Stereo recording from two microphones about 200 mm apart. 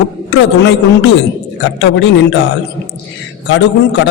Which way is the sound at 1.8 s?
65° left (ahead or behind).